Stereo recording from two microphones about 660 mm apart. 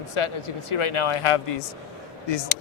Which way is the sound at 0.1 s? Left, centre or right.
Left.